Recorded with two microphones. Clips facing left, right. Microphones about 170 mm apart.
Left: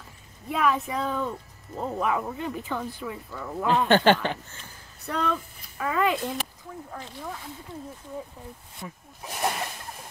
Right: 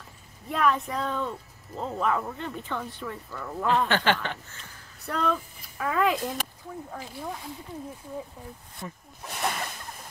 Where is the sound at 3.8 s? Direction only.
35° left (ahead or behind).